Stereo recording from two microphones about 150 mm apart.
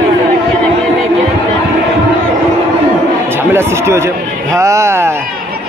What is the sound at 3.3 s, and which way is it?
Speech, 15° right (ahead or behind).